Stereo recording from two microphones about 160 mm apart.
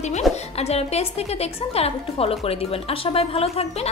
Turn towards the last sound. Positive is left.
turn(degrees=40)  # may be behind; listen again after turning